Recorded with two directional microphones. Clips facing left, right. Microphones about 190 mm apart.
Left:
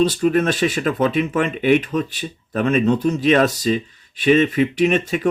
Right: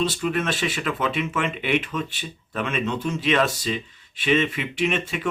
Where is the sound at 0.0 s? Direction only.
40° left (ahead or behind).